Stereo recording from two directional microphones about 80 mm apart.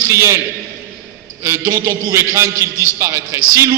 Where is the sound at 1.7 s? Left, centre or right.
Right.